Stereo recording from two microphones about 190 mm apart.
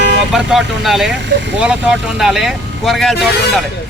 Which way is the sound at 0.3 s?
Centre (ahead or behind).